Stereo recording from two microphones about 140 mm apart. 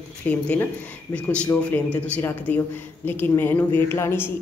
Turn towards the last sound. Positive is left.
turn(degrees=15)  # may be behind; listen again after turning